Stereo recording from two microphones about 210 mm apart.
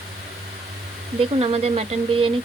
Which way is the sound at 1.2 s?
30° right (ahead or behind).